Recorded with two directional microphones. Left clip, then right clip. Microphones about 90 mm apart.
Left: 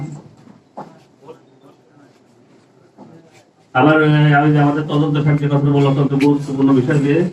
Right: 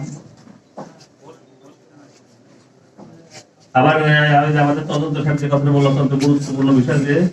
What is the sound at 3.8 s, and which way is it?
A man's voice, 30° left (ahead or behind).